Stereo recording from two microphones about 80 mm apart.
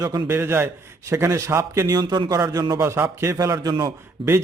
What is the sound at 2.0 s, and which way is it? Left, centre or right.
Speech, right.